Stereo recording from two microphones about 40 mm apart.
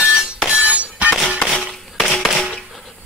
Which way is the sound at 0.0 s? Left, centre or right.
Centre.